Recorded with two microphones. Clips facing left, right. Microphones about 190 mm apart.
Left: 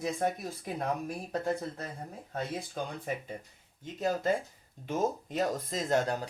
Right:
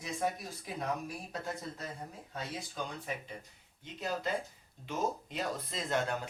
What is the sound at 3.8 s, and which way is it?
Speech, 45° left (ahead or behind).